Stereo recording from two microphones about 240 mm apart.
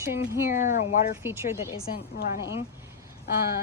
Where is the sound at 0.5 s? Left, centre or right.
Left.